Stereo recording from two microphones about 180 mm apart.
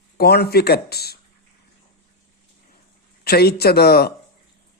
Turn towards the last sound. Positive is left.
turn(degrees=60)  # may be behind; listen again after turning